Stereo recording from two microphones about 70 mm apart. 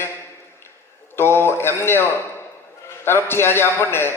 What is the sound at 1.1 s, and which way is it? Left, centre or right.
A man's voice, left.